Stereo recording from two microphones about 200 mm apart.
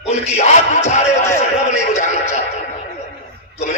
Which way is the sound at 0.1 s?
35° left (ahead or behind).